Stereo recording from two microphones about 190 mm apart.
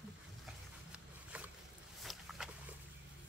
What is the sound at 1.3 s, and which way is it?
Boat, 10° right (ahead or behind).